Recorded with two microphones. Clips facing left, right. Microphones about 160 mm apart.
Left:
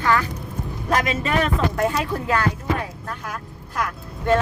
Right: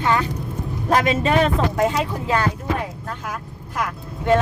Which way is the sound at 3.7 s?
20° right (ahead or behind).